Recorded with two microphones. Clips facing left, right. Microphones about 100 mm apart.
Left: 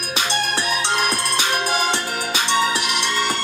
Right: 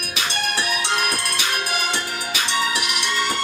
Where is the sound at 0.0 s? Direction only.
30° left (ahead or behind).